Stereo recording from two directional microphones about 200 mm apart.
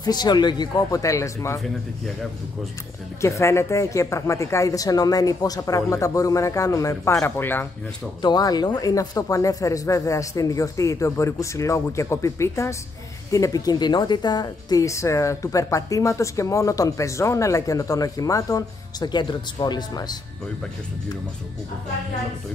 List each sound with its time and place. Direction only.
0.0 s speech: 20° left (ahead or behind)
3.2 s a woman's voice: 15° left (ahead or behind)